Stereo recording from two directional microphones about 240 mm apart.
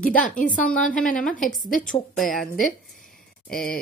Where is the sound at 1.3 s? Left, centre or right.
Left.